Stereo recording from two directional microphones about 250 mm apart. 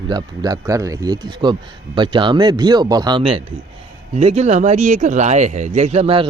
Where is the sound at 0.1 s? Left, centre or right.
Centre.